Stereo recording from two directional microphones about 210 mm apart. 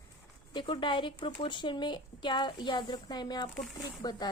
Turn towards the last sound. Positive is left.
turn(degrees=20)  # may be behind; listen again after turning